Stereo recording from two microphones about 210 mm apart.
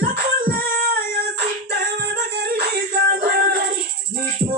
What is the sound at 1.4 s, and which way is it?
Singing, 45° right (ahead or behind).